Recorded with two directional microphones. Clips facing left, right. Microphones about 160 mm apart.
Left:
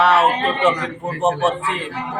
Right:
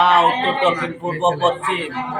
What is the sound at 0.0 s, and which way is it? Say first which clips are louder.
A man's voice: even; 20° right (ahead or behind).